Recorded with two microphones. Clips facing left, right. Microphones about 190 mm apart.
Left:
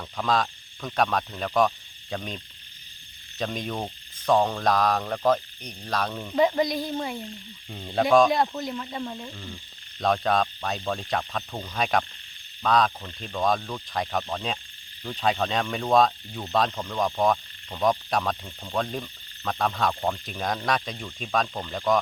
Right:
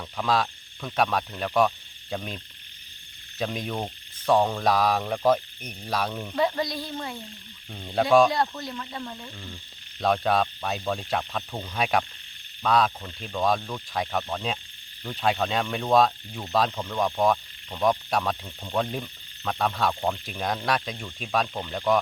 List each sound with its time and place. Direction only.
0.2 s speech: 5° right (ahead or behind)
6.3 s speech: 20° left (ahead or behind)
7.7 s speech: centre (ahead or behind)
8.3 s speech: 20° left (ahead or behind)
10.0 s speech: 5° right (ahead or behind)